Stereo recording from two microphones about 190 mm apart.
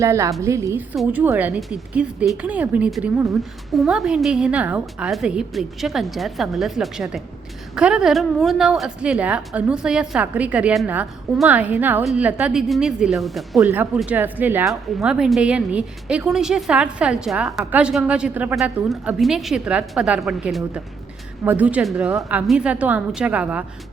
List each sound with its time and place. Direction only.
0.0 s a woman's voice: 15° right (ahead or behind)